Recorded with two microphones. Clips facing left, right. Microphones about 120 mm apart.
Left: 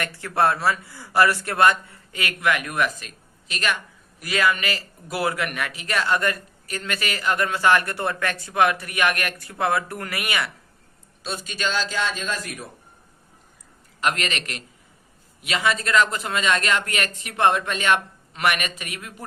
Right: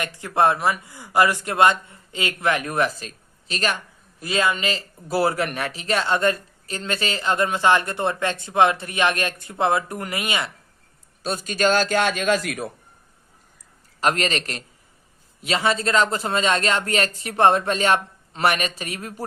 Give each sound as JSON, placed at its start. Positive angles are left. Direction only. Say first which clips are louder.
{"t": 0.0, "sound": "a man's voice", "louder": "right 2 dB", "side_deg": -15}
{"t": 11.2, "sound": "a man's voice", "louder": "right 7 dB", "side_deg": -45}
{"t": 14.0, "sound": "speech", "louder": "right 3 dB", "side_deg": -35}